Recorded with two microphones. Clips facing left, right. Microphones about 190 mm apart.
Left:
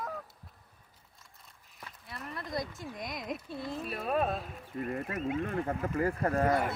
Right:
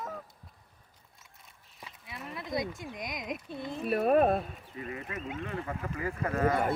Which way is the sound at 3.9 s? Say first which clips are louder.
Right 8 dB; 55° right (ahead or behind).